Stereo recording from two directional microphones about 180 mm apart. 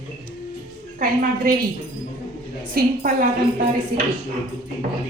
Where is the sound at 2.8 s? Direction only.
55° right (ahead or behind).